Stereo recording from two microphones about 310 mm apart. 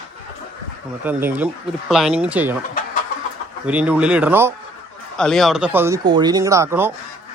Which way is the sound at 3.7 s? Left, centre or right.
Centre.